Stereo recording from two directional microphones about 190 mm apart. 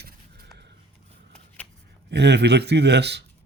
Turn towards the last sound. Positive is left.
turn(degrees=-60)  # may be behind; listen again after turning